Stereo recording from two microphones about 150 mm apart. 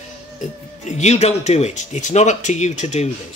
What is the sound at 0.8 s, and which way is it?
Speech, 50° left (ahead or behind).